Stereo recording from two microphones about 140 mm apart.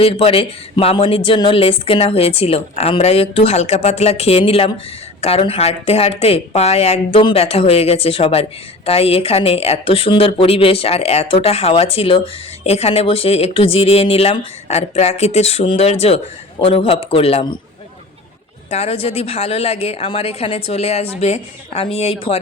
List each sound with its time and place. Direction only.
0.0 s speech: 45° left (ahead or behind)
18.7 s speech: 50° left (ahead or behind)